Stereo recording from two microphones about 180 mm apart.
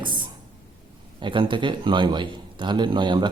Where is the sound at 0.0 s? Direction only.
25° right (ahead or behind).